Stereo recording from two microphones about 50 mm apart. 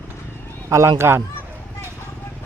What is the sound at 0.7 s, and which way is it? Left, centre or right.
Speech, right.